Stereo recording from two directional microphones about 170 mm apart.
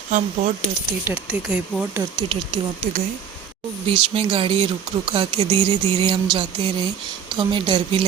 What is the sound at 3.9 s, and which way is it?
Speech, 30° right (ahead or behind).